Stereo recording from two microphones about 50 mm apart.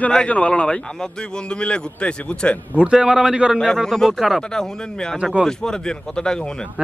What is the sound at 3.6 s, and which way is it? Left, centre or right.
Speech, centre.